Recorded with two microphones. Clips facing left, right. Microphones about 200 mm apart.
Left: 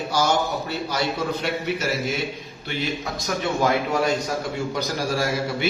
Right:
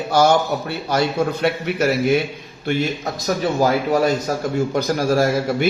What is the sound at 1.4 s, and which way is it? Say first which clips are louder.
Speech: right 6 dB; 55° right (ahead or behind).